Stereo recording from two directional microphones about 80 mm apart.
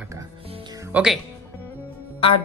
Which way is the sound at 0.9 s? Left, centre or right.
Centre.